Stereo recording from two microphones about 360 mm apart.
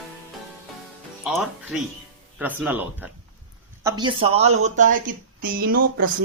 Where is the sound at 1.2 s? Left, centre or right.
Centre.